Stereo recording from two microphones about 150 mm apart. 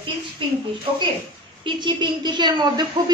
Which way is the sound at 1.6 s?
30° right (ahead or behind).